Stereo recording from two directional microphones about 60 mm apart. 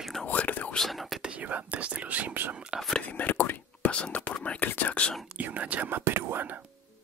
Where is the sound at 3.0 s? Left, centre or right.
Left.